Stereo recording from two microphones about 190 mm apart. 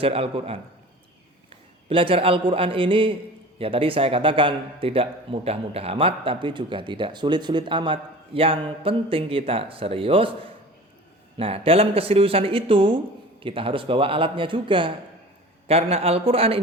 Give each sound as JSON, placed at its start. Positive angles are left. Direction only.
{"t": 0.0, "sound": "a man's voice", "side_deg": -30}
{"t": 1.9, "sound": "speech", "side_deg": -30}
{"t": 11.3, "sound": "a man's voice", "side_deg": -30}